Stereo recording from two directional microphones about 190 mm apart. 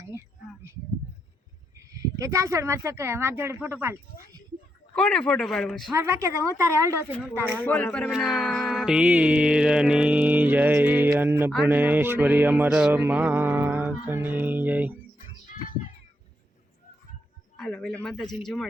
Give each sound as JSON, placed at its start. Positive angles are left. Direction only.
{"t": 0.0, "sound": "a sound", "side_deg": -15}
{"t": 1.9, "sound": "speech", "side_deg": -15}
{"t": 4.9, "sound": "mantra", "side_deg": 5}
{"t": 5.9, "sound": "speech", "side_deg": -15}
{"t": 7.6, "sound": "speech", "side_deg": 10}
{"t": 8.1, "sound": "mantra", "side_deg": 0}
{"t": 17.6, "sound": "speech", "side_deg": 0}